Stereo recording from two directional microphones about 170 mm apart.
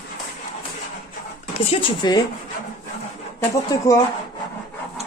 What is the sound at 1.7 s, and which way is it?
Speech, 30° left (ahead or behind).